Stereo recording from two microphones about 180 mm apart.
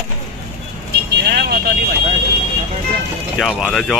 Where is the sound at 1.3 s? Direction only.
60° right (ahead or behind).